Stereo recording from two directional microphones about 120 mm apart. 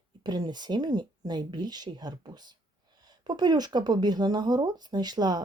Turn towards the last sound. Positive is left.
turn(degrees=-35)  # may be behind; listen again after turning